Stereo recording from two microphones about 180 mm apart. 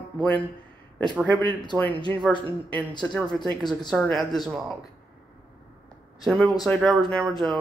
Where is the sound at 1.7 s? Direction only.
10° left (ahead or behind).